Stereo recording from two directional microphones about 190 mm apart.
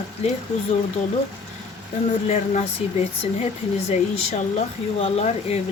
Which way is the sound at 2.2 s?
35° left (ahead or behind).